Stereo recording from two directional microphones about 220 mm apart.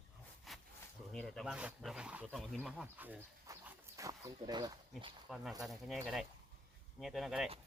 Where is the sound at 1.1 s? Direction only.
Centre (ahead or behind); by 4.7 s 15° right (ahead or behind).